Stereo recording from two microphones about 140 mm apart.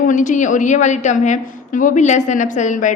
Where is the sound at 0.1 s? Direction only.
65° left (ahead or behind).